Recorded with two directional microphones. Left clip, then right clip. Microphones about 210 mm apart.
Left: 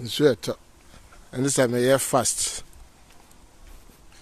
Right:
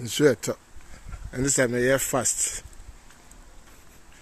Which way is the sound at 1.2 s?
15° left (ahead or behind).